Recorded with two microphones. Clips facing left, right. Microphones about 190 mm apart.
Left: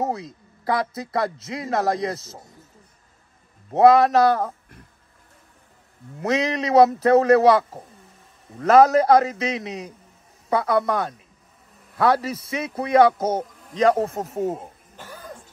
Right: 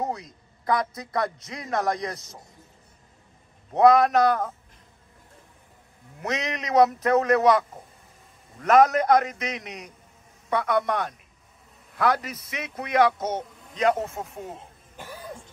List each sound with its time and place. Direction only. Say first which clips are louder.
0.0 s a man's voice: left 4 dB; 25° left (ahead or behind)
3.7 s a man's voice: left 3 dB; 30° left (ahead or behind)
6.1 s a man's voice: left 7 dB; 30° left (ahead or behind)
14.3 s speech: left 12 dB; 45° left (ahead or behind)
15.0 s cough: right 1 dB; 10° right (ahead or behind)